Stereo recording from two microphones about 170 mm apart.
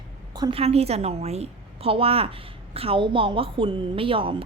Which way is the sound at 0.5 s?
35° right (ahead or behind).